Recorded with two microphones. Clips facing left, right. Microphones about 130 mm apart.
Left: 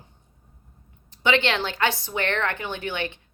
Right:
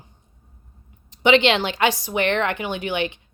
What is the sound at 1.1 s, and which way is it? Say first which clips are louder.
A woman's voice: right 6 dB; 20° right (ahead or behind).